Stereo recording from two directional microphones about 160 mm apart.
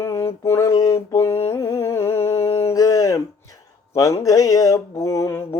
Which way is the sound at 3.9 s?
20° left (ahead or behind).